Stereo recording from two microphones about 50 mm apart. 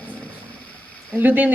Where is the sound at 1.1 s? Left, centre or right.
Right.